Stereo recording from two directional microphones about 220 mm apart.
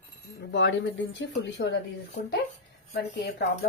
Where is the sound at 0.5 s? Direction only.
55° left (ahead or behind).